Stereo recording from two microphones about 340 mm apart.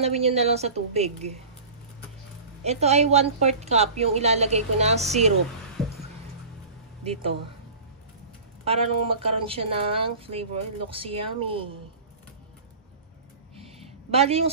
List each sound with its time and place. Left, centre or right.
0.0 s a woman's voice: centre
2.6 s a woman's voice: centre
8.6 s speech: centre
14.1 s speech: centre